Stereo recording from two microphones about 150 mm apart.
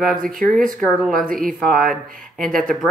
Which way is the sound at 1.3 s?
65° right (ahead or behind).